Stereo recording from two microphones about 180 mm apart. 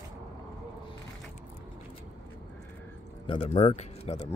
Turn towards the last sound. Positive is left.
turn(degrees=40)  # may be behind; listen again after turning